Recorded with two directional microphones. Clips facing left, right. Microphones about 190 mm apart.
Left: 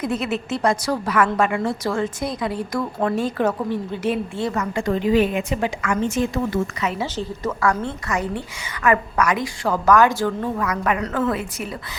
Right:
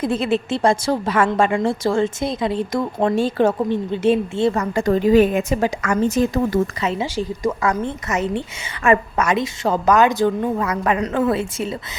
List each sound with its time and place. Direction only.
0.0 s a woman's voice: 30° right (ahead or behind)
7.0 s a woman's voice: 15° right (ahead or behind)